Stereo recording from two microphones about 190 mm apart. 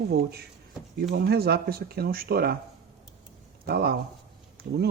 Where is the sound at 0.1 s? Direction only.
55° right (ahead or behind).